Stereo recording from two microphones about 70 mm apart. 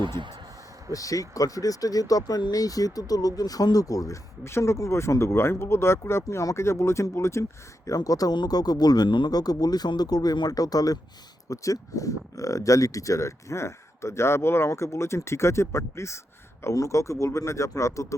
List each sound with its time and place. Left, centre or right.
0.9 s speech: left
4.4 s speech: left
7.9 s speech: left